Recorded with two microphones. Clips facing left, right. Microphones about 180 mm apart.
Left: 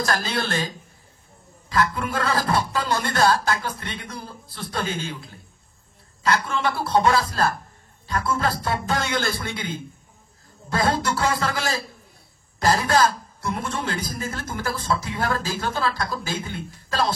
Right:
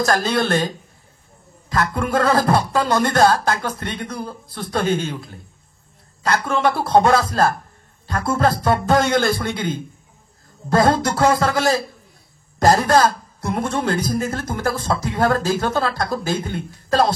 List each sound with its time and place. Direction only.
0.0 s speech: 45° right (ahead or behind)
6.2 s speech: 45° right (ahead or behind)